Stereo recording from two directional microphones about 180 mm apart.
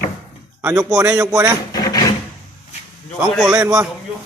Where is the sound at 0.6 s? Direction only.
15° right (ahead or behind).